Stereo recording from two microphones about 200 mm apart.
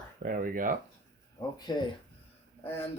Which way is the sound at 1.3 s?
20° left (ahead or behind).